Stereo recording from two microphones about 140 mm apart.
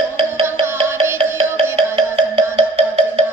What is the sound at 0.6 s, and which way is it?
Music, 45° right (ahead or behind).